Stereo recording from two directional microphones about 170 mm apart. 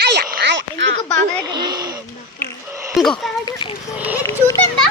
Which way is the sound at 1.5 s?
25° right (ahead or behind).